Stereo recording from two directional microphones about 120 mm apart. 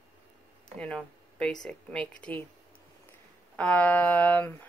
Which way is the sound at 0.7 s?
10° left (ahead or behind).